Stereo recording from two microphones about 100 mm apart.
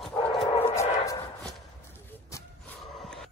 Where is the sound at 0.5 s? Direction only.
70° left (ahead or behind).